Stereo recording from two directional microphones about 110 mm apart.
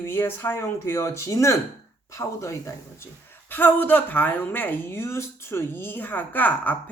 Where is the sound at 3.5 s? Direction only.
15° left (ahead or behind).